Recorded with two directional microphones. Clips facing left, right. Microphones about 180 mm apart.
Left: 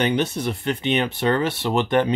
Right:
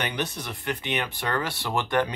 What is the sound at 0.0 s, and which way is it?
Speech, 25° left (ahead or behind).